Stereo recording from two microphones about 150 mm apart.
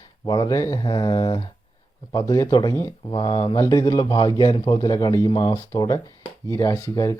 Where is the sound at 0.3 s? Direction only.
25° left (ahead or behind).